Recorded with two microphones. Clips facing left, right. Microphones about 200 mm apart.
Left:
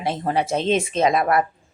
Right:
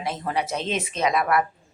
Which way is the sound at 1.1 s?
45° left (ahead or behind).